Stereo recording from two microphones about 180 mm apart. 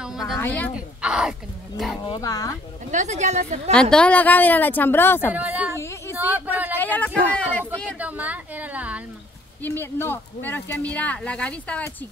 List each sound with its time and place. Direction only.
0.4 s speech: 10° left (ahead or behind)
0.7 s speech: 5° right (ahead or behind)
2.0 s speech: 20° left (ahead or behind)
2.9 s a woman's voice: 40° right (ahead or behind)
3.7 s speech: 5° left (ahead or behind)
5.3 s a woman's voice: 10° right (ahead or behind)
5.8 s a sound: 15° left (ahead or behind)
6.1 s a sound: 10° right (ahead or behind)
6.8 s speech: 10° left (ahead or behind)
8.0 s a woman's voice: 10° right (ahead or behind)
9.6 s speech: 10° left (ahead or behind)